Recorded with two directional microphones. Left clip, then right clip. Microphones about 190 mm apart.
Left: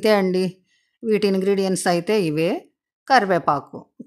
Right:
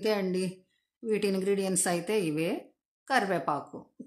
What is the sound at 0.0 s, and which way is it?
Speech, 50° left (ahead or behind).